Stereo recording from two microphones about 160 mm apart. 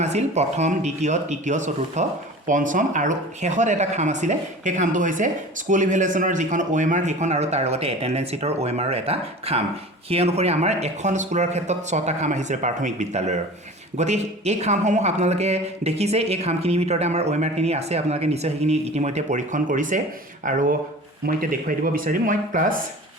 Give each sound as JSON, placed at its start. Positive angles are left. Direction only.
{"t": 0.0, "sound": "speech", "side_deg": -45}
{"t": 21.2, "sound": "speech", "side_deg": -65}